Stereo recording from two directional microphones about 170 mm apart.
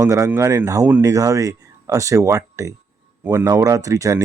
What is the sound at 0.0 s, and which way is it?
Speech, 15° right (ahead or behind).